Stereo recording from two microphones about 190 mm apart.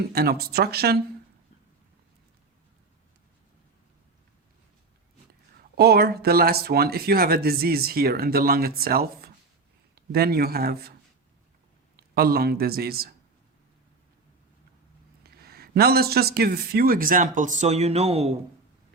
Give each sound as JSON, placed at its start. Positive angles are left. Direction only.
{"t": 0.0, "sound": "speech", "side_deg": -55}
{"t": 5.7, "sound": "a man's voice", "side_deg": -55}
{"t": 11.9, "sound": "speech", "side_deg": -50}
{"t": 15.2, "sound": "speech", "side_deg": -55}